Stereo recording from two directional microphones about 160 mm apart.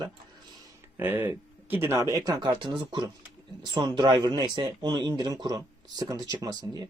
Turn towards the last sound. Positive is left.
turn(degrees=-25)  # may be behind; listen again after turning